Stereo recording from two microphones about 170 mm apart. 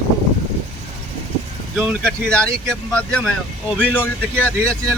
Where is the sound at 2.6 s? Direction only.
5° left (ahead or behind).